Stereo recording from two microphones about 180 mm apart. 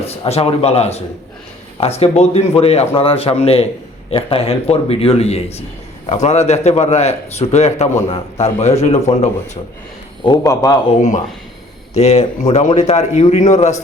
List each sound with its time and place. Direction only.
0.0 s a man's voice: 35° left (ahead or behind)
10.2 s a man's voice: 20° left (ahead or behind)
11.9 s a man's voice: 40° left (ahead or behind)